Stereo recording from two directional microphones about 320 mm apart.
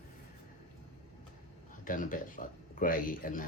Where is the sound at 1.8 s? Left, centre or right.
Left.